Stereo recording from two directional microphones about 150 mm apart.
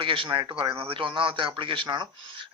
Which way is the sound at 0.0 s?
35° right (ahead or behind).